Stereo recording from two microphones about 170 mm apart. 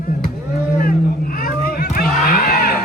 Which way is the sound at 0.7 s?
55° left (ahead or behind).